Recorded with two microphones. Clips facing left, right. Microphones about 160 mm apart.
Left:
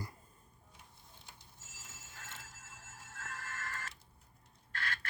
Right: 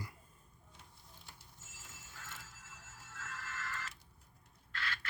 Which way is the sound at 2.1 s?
45° left (ahead or behind).